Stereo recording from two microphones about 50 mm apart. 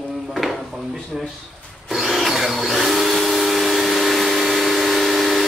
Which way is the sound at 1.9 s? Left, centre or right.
Centre.